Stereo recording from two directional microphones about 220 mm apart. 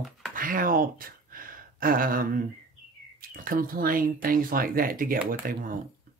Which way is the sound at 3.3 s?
40° right (ahead or behind).